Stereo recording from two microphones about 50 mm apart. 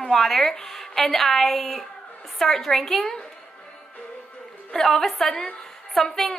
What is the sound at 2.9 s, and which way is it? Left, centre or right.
Speech, centre.